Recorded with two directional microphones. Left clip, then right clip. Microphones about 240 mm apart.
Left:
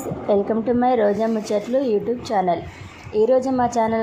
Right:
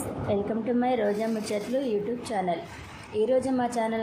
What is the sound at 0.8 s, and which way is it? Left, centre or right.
A woman's voice, centre.